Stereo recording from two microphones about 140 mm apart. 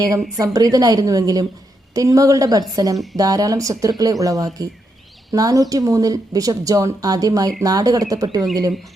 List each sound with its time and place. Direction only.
0.3 s speech: 25° right (ahead or behind)